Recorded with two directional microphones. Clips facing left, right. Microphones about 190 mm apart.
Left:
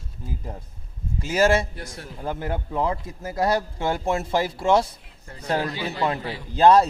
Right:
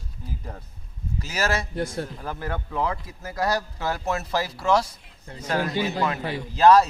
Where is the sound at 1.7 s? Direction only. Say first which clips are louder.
Right 10 dB; 55° right (ahead or behind).